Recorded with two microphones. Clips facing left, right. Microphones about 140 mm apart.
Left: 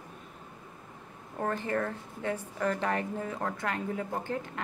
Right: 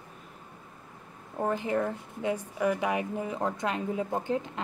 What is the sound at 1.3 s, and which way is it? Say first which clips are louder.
A woman's voice: right 3 dB; 15° right (ahead or behind).